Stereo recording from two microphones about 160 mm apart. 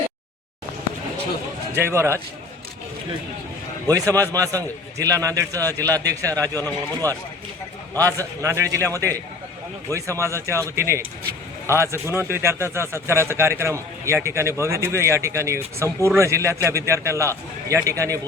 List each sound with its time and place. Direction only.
1.7 s speech: 15° right (ahead or behind)
3.8 s a man's voice: 20° right (ahead or behind)
7.0 s speech: 15° left (ahead or behind)
7.9 s a man's voice: 20° right (ahead or behind)